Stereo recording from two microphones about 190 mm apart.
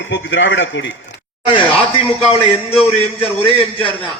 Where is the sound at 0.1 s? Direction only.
70° left (ahead or behind).